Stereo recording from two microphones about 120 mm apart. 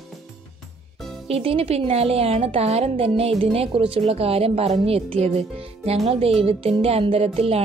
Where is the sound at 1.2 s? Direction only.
55° right (ahead or behind).